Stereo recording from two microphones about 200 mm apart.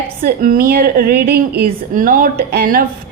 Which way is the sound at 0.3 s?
45° right (ahead or behind).